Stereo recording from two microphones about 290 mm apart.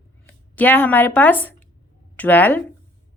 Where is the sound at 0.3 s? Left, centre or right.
Centre.